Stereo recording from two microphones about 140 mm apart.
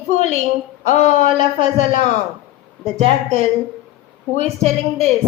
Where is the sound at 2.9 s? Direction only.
50° right (ahead or behind).